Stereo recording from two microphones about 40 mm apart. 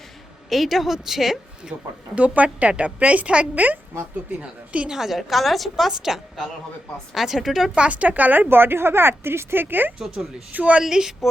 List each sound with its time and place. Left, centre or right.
0.5 s a woman's voice: centre
2.1 s a woman's voice: right
3.5 s a woman's voice: right
4.9 s a woman's voice: centre
5.9 s speech: centre
7.8 s a woman's voice: right
8.4 s speech: right
10.5 s a woman's voice: right
10.8 s speech: centre